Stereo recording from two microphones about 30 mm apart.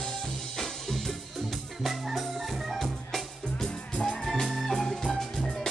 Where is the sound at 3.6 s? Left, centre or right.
Left.